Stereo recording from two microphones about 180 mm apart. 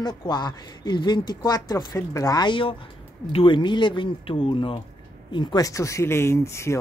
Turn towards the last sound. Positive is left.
turn(degrees=15)  # may be behind; listen again after turning